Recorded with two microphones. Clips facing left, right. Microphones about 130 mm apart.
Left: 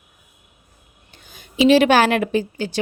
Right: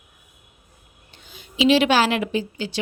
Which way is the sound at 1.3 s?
45° left (ahead or behind).